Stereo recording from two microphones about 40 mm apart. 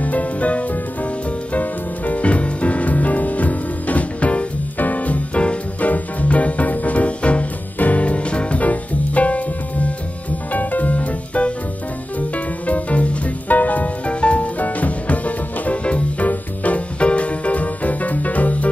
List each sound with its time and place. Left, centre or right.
0.0 s music: left
4.7 s music: left
14.0 s music: left